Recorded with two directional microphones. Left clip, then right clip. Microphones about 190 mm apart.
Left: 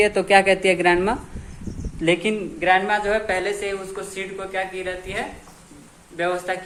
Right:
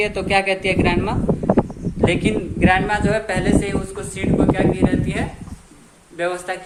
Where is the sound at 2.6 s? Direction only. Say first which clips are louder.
Even; centre (ahead or behind).